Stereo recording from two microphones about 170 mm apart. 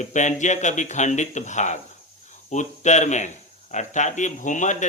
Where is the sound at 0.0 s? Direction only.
45° left (ahead or behind).